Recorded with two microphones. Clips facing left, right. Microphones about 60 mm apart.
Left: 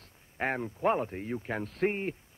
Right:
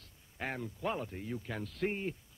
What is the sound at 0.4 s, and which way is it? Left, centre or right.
A man's voice, left.